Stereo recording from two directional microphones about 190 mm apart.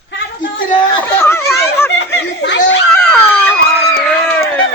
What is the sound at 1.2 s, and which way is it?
Snicker, 15° left (ahead or behind).